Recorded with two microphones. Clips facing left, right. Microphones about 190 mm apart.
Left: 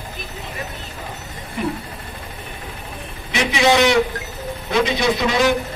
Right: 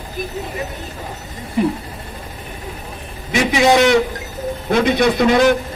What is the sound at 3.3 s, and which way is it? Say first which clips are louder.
A man's voice: right 3 dB; 45° right (ahead or behind).